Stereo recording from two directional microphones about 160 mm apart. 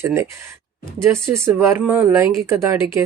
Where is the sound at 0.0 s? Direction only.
15° right (ahead or behind).